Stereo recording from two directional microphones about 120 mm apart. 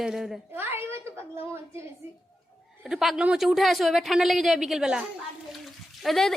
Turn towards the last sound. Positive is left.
turn(degrees=0)  # may be behind; listen again after turning